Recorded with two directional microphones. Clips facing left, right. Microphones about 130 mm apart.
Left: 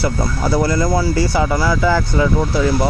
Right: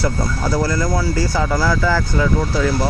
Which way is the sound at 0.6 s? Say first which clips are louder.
Left 4 dB; 20° left (ahead or behind).